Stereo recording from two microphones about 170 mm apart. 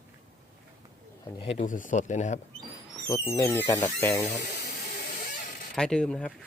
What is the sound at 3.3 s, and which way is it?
Speech, 15° left (ahead or behind).